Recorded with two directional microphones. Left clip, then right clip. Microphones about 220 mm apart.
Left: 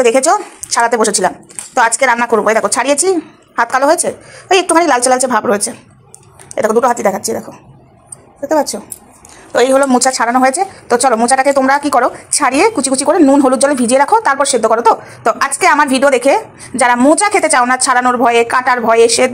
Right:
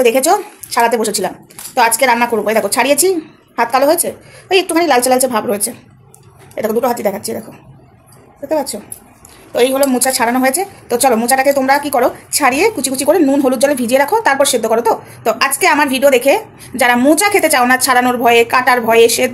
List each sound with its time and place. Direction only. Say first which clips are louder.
0.0 s a woman's voice: left 1 dB; 5° left (ahead or behind)
8.5 s a woman's voice: left 4 dB; 5° right (ahead or behind)
9.5 s a woman's voice: left 3 dB; 10° left (ahead or behind)